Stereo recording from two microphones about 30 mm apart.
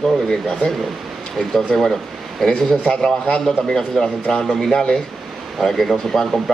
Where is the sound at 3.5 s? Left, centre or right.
Centre.